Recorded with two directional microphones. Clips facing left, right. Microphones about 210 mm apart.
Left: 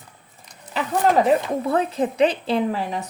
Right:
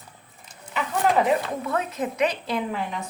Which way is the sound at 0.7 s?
35° left (ahead or behind).